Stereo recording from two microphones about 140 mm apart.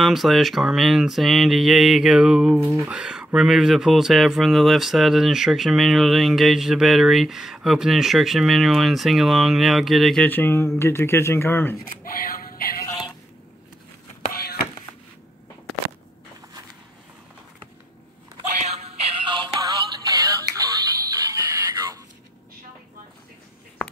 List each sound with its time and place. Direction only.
0.0 s speech: centre (ahead or behind)
10.2 s speech: 15° left (ahead or behind)
12.0 s synthetic singing: 90° left
14.3 s a sound: 90° left
18.6 s music: 50° right (ahead or behind); by 20.6 s 25° right (ahead or behind)
21.2 s a sound: 25° right (ahead or behind)